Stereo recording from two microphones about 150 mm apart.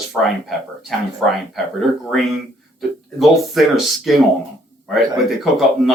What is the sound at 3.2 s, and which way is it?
Speech, centre (ahead or behind).